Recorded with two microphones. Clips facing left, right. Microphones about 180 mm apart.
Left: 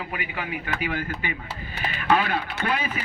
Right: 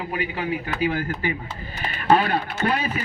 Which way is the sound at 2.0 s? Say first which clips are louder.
Right 4 dB; 35° right (ahead or behind).